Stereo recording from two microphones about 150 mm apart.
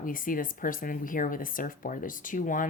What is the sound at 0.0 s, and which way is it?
Speech, 65° left (ahead or behind).